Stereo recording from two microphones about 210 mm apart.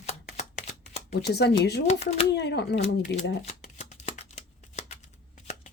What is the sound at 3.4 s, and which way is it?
Shuffling cards, 30° left (ahead or behind).